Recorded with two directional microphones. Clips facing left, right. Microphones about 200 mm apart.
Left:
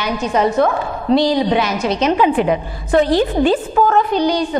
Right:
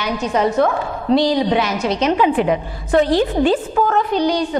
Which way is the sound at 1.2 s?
10° left (ahead or behind).